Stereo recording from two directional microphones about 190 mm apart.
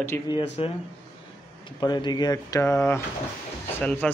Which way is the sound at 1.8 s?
20° left (ahead or behind).